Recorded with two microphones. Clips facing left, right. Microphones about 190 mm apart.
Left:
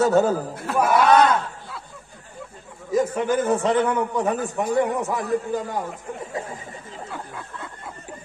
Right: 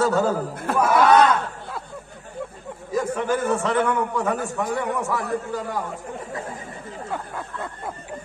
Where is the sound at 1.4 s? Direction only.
55° right (ahead or behind).